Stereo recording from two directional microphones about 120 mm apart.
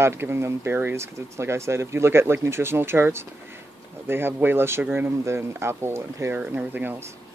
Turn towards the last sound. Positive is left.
turn(degrees=-15)  # may be behind; listen again after turning